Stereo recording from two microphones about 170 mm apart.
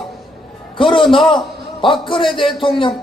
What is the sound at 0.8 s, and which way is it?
A man's voice, 30° left (ahead or behind).